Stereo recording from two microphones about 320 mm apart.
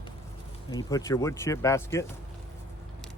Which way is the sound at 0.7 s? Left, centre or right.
Centre.